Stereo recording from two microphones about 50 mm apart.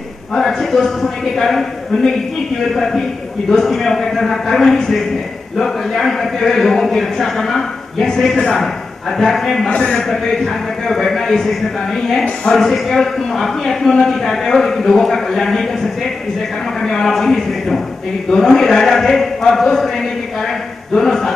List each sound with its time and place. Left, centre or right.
0.4 s speech: centre
9.7 s a man's voice: left
9.9 s speech: centre
16.8 s speech: centre